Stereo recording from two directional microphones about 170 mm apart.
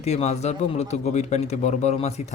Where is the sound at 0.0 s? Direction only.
40° left (ahead or behind).